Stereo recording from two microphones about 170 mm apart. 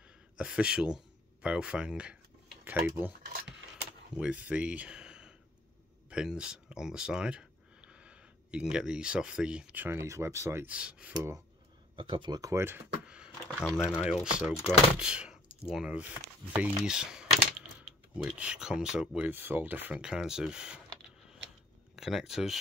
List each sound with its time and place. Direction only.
0.4 s speech: 5° right (ahead or behind)
4.2 s speech: 10° right (ahead or behind)
12.0 s speech: 30° right (ahead or behind); by 13.3 s 10° right (ahead or behind)
13.6 s speech: 10° left (ahead or behind)
14.2 s speech: centre (ahead or behind)
21.9 s speech: centre (ahead or behind)